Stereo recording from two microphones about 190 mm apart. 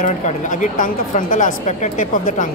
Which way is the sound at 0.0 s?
40° left (ahead or behind).